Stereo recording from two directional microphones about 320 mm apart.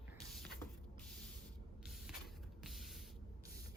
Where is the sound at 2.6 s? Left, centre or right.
Centre.